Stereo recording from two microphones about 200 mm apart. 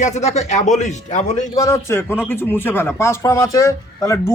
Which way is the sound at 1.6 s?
15° left (ahead or behind).